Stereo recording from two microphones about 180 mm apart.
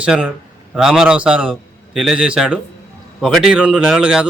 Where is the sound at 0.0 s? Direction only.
5° right (ahead or behind).